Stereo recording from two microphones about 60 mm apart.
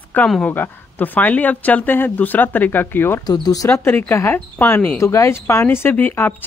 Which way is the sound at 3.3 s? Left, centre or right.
Left.